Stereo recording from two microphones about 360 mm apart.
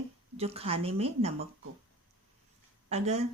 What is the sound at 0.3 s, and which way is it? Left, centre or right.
Speech, centre.